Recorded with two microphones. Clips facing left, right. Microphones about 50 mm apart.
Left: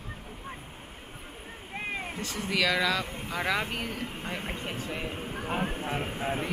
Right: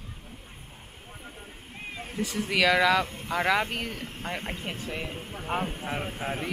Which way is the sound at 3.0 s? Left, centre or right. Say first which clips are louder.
Left 1 dB; centre.